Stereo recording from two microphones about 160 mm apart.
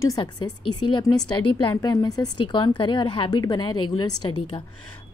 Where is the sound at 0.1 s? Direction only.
25° left (ahead or behind).